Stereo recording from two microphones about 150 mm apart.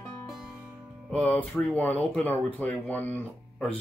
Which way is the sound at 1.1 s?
10° left (ahead or behind).